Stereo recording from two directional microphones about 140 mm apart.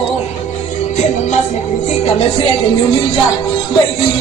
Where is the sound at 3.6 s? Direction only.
35° left (ahead or behind).